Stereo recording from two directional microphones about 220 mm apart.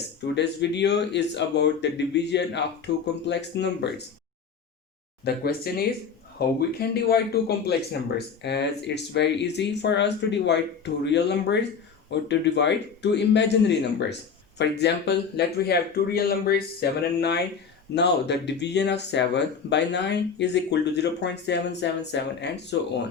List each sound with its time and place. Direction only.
0.2 s speech: 50° left (ahead or behind)
5.2 s speech: 45° left (ahead or behind)